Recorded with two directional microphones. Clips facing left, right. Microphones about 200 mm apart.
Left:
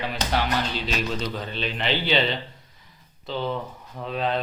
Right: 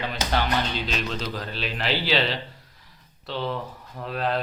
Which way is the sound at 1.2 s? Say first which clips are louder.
Left 2 dB; centre (ahead or behind).